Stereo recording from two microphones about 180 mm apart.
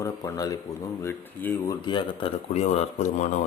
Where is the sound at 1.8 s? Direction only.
30° left (ahead or behind).